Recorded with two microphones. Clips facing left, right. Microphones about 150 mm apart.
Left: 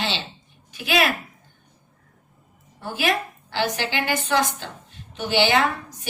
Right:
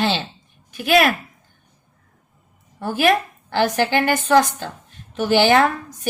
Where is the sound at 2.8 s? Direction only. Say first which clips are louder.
Right 6 dB; 50° right (ahead or behind).